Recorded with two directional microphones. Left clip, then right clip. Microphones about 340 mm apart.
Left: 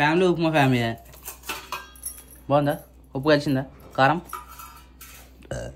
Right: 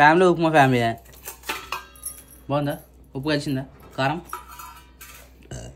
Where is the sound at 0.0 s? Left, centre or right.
Centre.